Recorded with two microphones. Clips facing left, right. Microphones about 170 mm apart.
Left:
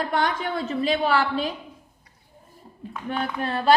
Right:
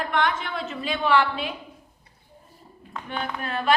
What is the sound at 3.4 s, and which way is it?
Speech, 35° left (ahead or behind).